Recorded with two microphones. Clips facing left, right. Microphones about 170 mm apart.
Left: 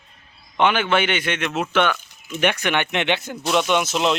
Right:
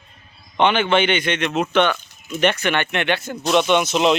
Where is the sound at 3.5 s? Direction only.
5° left (ahead or behind).